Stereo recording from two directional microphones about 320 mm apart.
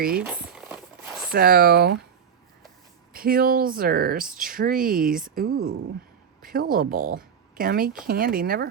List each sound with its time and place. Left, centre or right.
0.2 s a sound: centre
1.3 s speech: right
3.1 s speech: right